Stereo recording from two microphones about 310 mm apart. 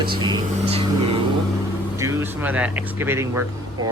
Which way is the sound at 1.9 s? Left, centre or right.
Centre.